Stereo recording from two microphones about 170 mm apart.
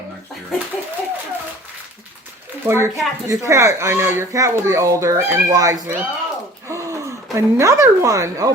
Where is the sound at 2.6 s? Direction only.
15° right (ahead or behind).